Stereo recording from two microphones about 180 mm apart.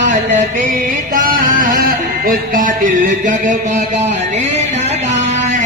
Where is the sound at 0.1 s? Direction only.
40° right (ahead or behind).